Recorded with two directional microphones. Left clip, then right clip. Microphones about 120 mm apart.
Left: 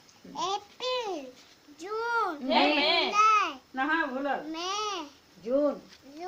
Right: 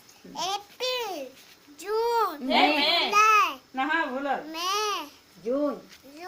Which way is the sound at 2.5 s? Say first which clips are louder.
Right 2 dB; 45° right (ahead or behind).